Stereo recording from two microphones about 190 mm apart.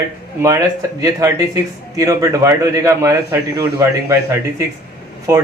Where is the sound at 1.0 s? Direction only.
15° right (ahead or behind).